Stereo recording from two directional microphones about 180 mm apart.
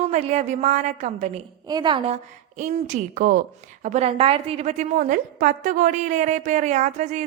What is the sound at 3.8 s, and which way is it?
A woman's voice, 40° right (ahead or behind).